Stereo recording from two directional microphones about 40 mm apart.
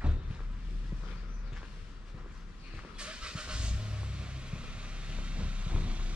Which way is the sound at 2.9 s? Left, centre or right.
Right.